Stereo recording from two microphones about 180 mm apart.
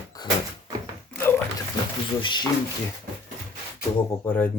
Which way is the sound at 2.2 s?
25° left (ahead or behind).